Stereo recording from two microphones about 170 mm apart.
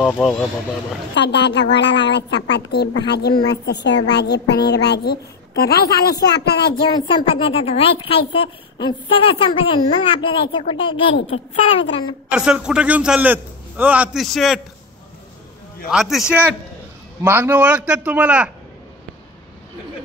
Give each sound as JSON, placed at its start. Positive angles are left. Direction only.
{"t": 0.0, "sound": "speech", "side_deg": 0}
{"t": 1.1, "sound": "a woman's voice", "side_deg": 90}
{"t": 7.2, "sound": "a woman's voice", "side_deg": 30}
{"t": 12.4, "sound": "a man's voice", "side_deg": -5}
{"t": 15.9, "sound": "a man's voice", "side_deg": 0}